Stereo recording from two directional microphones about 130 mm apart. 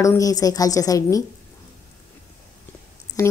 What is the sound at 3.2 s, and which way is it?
Speech, 25° left (ahead or behind).